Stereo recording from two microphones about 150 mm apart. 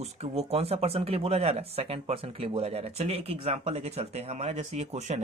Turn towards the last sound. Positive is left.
turn(degrees=-50)  # may be behind; listen again after turning